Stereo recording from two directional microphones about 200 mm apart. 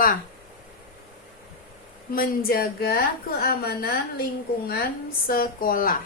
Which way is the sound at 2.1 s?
45° left (ahead or behind).